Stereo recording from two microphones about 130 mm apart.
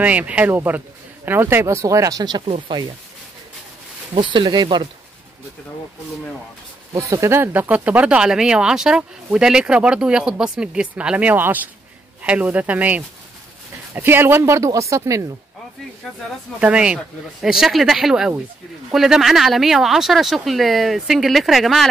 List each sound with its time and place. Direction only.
0.0 s speech: 10° right (ahead or behind); by 2.8 s 40° right (ahead or behind)
4.1 s speech: 40° right (ahead or behind)
7.0 s speech: 25° right (ahead or behind)
16.5 s speech: 10° right (ahead or behind)